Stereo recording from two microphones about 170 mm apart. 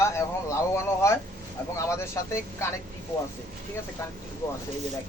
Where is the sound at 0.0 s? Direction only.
15° left (ahead or behind).